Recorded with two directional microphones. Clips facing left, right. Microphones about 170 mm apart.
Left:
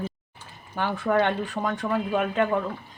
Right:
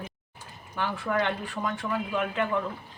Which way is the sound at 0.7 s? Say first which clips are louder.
Left 5 dB; 40° left (ahead or behind).